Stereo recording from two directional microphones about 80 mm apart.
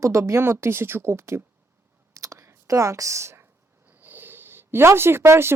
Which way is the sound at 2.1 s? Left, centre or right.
Right.